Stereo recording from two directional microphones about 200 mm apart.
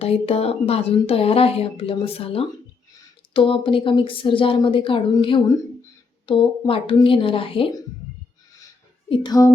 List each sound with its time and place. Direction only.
0.0 s speech: 30° left (ahead or behind)
9.0 s speech: 25° left (ahead or behind)